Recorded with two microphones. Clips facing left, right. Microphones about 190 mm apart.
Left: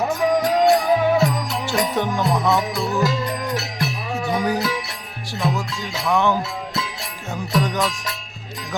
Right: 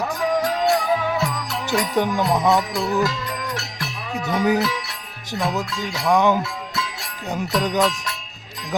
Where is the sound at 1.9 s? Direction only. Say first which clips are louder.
Right 1 dB; 15° right (ahead or behind).